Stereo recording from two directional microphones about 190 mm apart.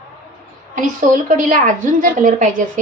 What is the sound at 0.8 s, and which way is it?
A woman's voice, 40° right (ahead or behind).